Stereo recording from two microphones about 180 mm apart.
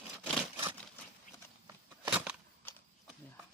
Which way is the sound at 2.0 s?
5° right (ahead or behind).